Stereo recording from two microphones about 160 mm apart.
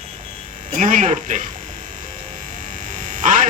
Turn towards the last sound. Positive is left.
turn(degrees=-50)  # may be behind; listen again after turning